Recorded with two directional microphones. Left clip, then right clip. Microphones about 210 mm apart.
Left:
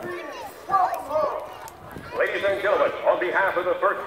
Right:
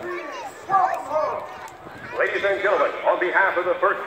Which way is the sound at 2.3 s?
45° left (ahead or behind).